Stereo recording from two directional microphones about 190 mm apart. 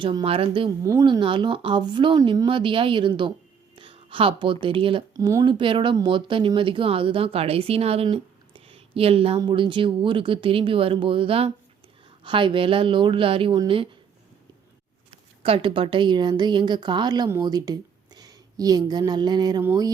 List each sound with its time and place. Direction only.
0.0 s speech: 25° right (ahead or behind)
0.8 s speech: 20° right (ahead or behind)
3.8 s a sound: 25° right (ahead or behind)
4.6 s speech: 25° right (ahead or behind)
15.4 s speech: 30° right (ahead or behind)